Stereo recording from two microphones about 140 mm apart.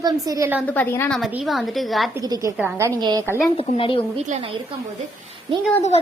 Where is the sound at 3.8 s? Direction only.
40° left (ahead or behind).